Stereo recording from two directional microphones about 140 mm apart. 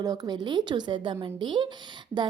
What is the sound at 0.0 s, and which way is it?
A woman's voice, 25° right (ahead or behind).